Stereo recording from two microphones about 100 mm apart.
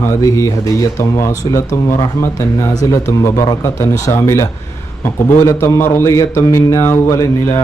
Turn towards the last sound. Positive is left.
turn(degrees=30)  # may be behind; listen again after turning